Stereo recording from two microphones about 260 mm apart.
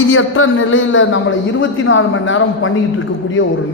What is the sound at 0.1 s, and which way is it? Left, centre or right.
A man's voice, left.